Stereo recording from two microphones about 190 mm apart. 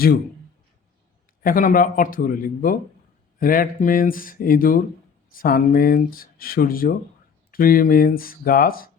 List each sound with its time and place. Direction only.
1.4 s speech: 45° left (ahead or behind)